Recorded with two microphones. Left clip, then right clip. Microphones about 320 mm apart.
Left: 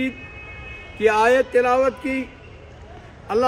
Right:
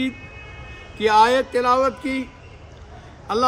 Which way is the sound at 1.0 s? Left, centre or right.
Centre.